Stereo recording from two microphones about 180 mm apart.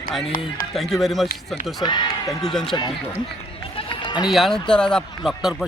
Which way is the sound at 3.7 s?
25° left (ahead or behind).